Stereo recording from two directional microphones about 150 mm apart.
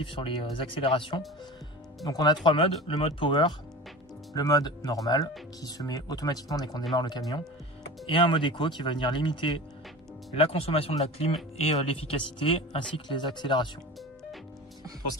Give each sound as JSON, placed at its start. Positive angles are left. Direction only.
{"t": 0.0, "sound": "speech", "side_deg": 35}